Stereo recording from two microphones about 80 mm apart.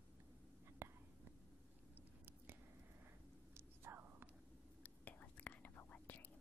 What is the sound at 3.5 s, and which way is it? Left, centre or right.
Whispering, right.